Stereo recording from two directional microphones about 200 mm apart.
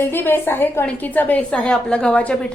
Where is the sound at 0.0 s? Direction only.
10° left (ahead or behind).